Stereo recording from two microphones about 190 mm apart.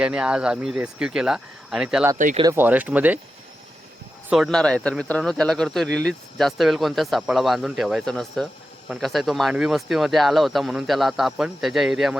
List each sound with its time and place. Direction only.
0.0 s speech: 5° right (ahead or behind)
2.1 s speech: 40° right (ahead or behind)
2.4 s speech: 15° right (ahead or behind)
4.3 s speech: centre (ahead or behind)